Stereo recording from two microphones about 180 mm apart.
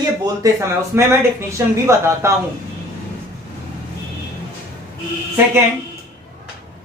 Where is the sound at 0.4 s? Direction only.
20° right (ahead or behind).